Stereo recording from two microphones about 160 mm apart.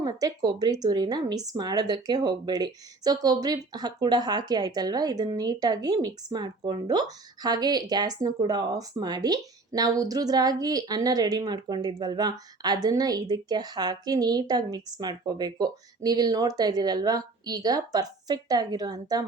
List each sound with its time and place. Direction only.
0.0 s speech: 20° right (ahead or behind)